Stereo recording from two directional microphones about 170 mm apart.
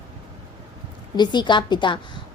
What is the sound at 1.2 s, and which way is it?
A woman's voice, 25° left (ahead or behind).